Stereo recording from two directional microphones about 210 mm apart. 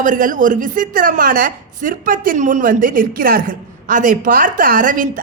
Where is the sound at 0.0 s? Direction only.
40° right (ahead or behind).